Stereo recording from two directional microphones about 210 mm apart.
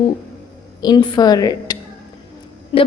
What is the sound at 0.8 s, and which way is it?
A woman's voice, 20° left (ahead or behind).